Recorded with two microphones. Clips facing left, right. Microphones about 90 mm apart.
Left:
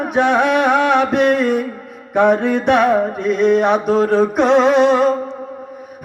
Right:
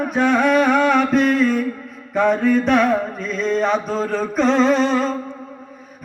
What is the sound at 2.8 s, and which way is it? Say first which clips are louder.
Carnatic music: left 4 dB; 25° left (ahead or behind).